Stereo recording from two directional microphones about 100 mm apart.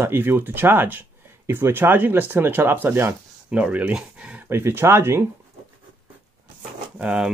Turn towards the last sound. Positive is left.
turn(degrees=-10)  # may be behind; listen again after turning